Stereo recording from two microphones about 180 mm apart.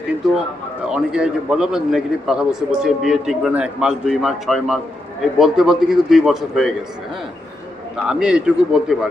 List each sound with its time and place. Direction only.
0.9 s a man's voice: 5° right (ahead or behind)
8.0 s a man's voice: 5° right (ahead or behind)